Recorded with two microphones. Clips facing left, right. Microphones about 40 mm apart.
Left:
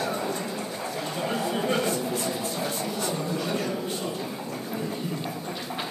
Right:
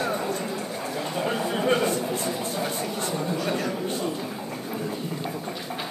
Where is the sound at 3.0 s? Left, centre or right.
Centre.